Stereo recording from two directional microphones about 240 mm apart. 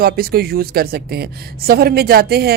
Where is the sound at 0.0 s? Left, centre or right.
Right.